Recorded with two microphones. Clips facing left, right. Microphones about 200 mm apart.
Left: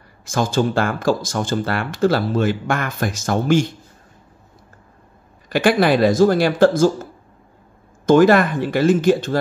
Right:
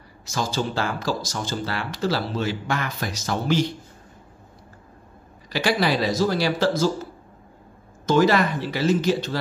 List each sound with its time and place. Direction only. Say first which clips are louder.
0.2 s speech: left 7 dB; 50° left (ahead or behind)
5.5 s speech: left 7 dB; 55° left (ahead or behind)
8.1 s speech: left 6 dB; 50° left (ahead or behind)